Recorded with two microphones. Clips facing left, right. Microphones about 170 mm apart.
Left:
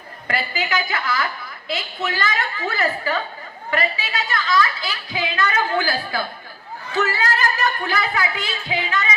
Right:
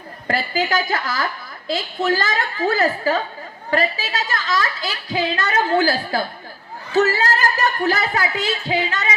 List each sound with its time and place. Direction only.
0.3 s a woman's voice: 45° right (ahead or behind)